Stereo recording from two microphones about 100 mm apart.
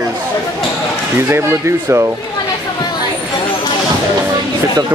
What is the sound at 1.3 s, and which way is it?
Speech, 25° right (ahead or behind).